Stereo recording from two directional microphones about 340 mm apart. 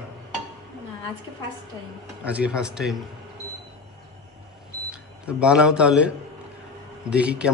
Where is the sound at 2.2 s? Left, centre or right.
Centre.